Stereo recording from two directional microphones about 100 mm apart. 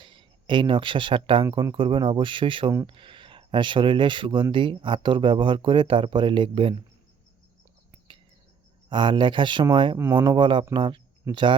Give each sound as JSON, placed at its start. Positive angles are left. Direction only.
{"t": 0.0, "sound": "speech", "side_deg": -55}
{"t": 8.9, "sound": "speech", "side_deg": -55}